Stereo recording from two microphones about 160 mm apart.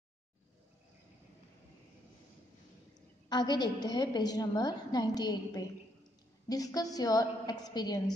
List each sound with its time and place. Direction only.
3.3 s a woman's voice: 25° left (ahead or behind)